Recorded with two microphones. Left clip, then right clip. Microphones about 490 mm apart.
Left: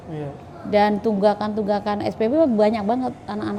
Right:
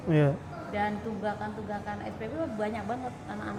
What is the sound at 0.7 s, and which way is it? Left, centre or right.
A woman's voice, left.